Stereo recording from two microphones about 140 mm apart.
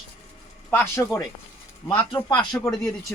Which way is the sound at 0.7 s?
15° left (ahead or behind).